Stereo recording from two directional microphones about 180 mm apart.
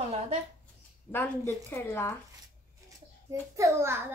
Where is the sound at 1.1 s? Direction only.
10° left (ahead or behind).